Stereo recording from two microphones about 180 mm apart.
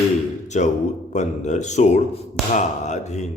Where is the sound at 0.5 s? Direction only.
40° left (ahead or behind).